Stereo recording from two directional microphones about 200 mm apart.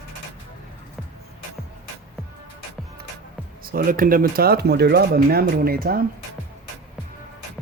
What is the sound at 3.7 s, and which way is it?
Speech, 45° right (ahead or behind).